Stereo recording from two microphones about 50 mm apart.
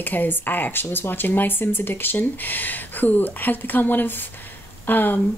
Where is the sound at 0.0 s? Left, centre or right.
Left.